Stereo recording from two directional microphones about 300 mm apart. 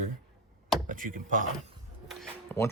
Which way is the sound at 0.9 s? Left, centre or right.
Right.